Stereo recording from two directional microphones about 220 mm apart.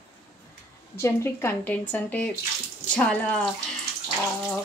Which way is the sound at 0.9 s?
10° left (ahead or behind).